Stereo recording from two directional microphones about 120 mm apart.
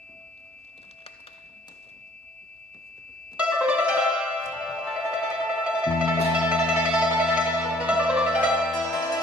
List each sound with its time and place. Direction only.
3.3 s music: 10° right (ahead or behind)
8.7 s music: 30° left (ahead or behind)